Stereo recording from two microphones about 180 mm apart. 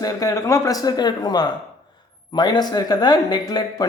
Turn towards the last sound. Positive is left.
turn(degrees=20)  # may be behind; listen again after turning